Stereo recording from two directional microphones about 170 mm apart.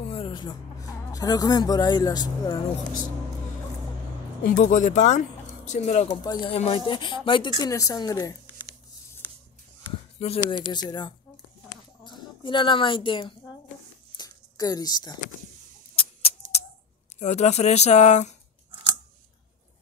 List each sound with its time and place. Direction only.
0.1 s speech: 30° left (ahead or behind)
4.4 s speech: 50° left (ahead or behind); by 8.4 s 20° left (ahead or behind)
10.1 s a woman's voice: 35° left (ahead or behind)
14.1 s a sound: 25° left (ahead or behind)
16.0 s a sound: 35° left (ahead or behind)
17.2 s speech: 40° left (ahead or behind)